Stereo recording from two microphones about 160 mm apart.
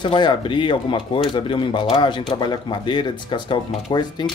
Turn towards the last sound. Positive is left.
turn(degrees=30)  # may be behind; listen again after turning